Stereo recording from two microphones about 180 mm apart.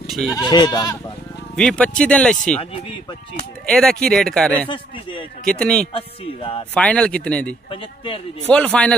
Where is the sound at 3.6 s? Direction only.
5° left (ahead or behind).